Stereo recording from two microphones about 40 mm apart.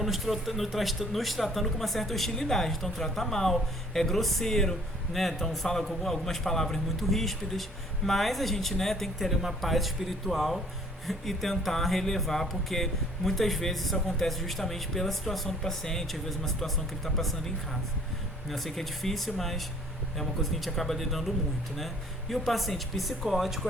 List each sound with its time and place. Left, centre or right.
0.0 s a man's voice: centre
18.4 s speech: centre